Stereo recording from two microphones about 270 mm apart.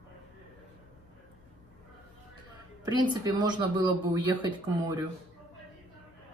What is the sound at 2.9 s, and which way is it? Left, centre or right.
Speech, centre.